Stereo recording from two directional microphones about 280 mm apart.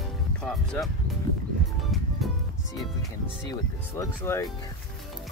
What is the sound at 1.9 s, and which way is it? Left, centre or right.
Music, centre.